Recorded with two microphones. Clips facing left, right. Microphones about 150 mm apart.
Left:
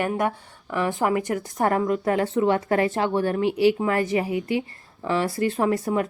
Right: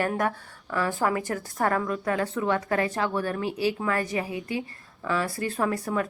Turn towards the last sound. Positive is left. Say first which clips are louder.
# left 4 dB
turn(degrees=25)  # may be behind; listen again after turning